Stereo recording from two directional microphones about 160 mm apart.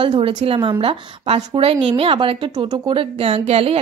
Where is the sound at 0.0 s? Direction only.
35° right (ahead or behind).